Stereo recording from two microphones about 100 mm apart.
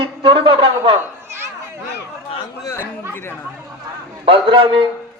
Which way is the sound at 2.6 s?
30° left (ahead or behind).